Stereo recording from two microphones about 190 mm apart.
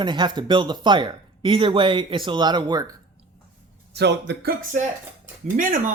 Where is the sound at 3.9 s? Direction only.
65° right (ahead or behind).